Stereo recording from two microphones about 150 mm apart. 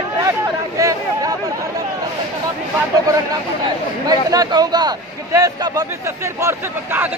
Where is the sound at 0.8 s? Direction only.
20° right (ahead or behind).